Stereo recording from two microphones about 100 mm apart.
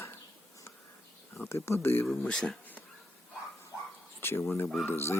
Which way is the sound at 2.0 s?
5° left (ahead or behind).